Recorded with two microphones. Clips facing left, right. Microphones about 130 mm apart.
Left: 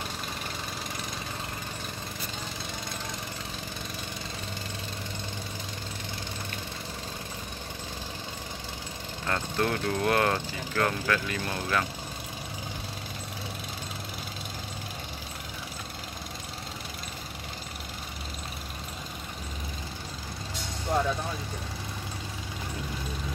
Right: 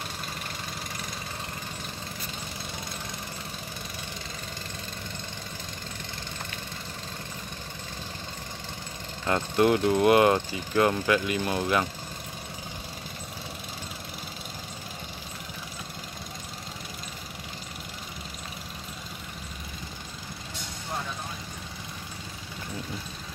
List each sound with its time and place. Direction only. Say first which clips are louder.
9.3 s speech: right 6 dB; 20° right (ahead or behind)